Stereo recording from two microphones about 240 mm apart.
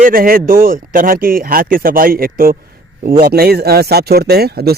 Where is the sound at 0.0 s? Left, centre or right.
Right.